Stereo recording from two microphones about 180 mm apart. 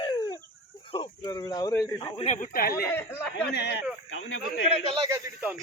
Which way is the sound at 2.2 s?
45° left (ahead or behind).